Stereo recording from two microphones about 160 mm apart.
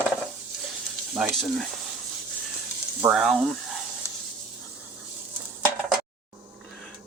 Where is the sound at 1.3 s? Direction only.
Centre (ahead or behind).